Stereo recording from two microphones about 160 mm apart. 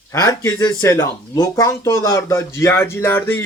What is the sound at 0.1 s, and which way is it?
A man's voice, 20° left (ahead or behind).